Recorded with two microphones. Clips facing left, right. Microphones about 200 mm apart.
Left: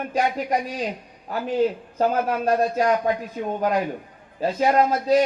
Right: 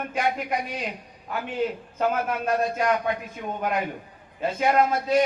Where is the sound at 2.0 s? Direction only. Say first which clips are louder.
Left 3 dB; 35° left (ahead or behind).